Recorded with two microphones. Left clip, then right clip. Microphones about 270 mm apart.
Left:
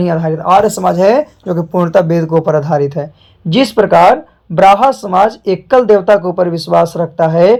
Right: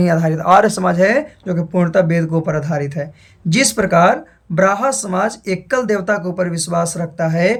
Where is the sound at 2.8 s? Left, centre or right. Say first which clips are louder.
Left 8 dB; centre.